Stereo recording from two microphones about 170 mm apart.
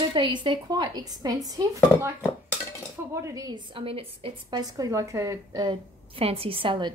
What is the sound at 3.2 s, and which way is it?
A woman's voice, 20° right (ahead or behind).